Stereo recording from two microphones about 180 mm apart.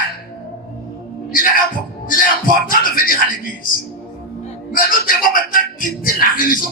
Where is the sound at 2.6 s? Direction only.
50° left (ahead or behind).